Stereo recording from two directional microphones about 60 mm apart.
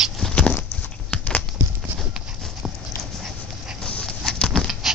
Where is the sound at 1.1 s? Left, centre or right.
Centre.